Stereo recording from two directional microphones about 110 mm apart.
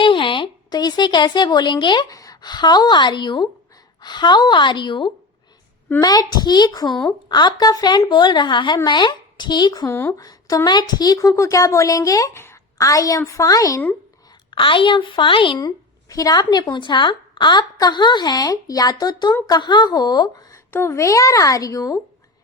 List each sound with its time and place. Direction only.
0.0 s a woman's voice: 50° left (ahead or behind); by 13.8 s 30° left (ahead or behind)
14.5 s a woman's voice: 50° left (ahead or behind)
15.6 s speech: 30° left (ahead or behind)
20.7 s speech: 20° left (ahead or behind)